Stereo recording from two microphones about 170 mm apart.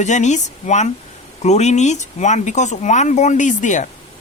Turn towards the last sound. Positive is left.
turn(degrees=45)  # may be behind; listen again after turning